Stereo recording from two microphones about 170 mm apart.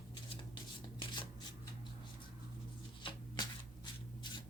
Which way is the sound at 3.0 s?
25° left (ahead or behind).